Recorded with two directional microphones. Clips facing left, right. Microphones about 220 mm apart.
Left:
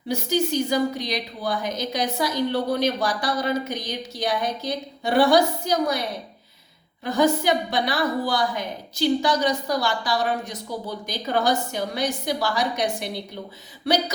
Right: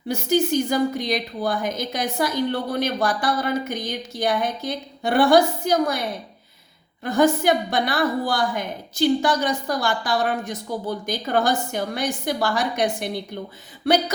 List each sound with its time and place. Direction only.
0.1 s a woman's voice: 50° right (ahead or behind)
7.0 s a woman's voice: 50° right (ahead or behind)